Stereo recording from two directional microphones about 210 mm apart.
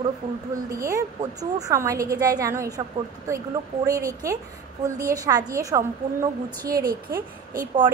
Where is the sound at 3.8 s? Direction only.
15° right (ahead or behind).